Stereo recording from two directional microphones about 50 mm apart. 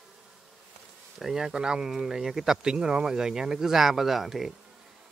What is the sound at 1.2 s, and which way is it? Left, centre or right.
Speech, centre.